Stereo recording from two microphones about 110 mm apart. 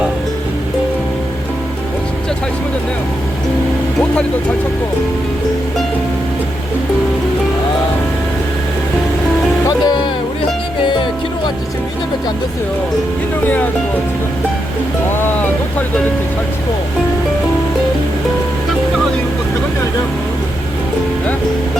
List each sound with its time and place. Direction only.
9.6 s music: 40° left (ahead or behind)
13.4 s speech: 15° left (ahead or behind)
15.1 s speech: 20° left (ahead or behind)